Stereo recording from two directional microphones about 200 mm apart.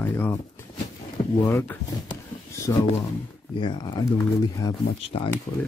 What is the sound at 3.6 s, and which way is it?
Speech, 20° left (ahead or behind).